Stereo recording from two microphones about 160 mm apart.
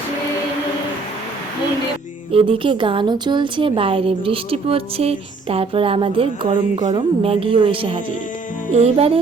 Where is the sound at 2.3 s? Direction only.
35° right (ahead or behind).